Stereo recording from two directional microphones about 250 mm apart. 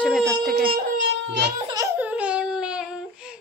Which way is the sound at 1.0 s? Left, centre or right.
Right.